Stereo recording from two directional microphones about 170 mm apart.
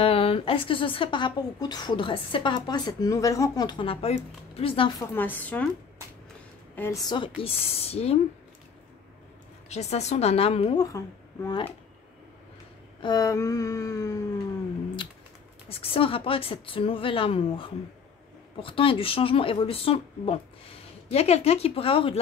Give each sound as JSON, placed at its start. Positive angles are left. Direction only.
{"t": 0.0, "sound": "speech", "side_deg": 35}
{"t": 5.1, "sound": "speech", "side_deg": 10}
{"t": 6.7, "sound": "speech", "side_deg": 15}
{"t": 9.7, "sound": "speech", "side_deg": 40}
{"t": 10.8, "sound": "speech", "side_deg": 20}
{"t": 13.0, "sound": "speech", "side_deg": 20}
{"t": 15.7, "sound": "speech", "side_deg": 35}